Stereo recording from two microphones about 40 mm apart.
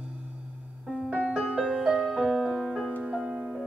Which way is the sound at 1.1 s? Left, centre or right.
Right.